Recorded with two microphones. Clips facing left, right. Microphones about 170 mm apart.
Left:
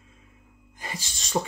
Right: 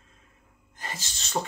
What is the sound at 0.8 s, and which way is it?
Speech, 10° left (ahead or behind).